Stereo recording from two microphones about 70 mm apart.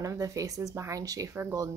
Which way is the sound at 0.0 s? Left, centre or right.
Right.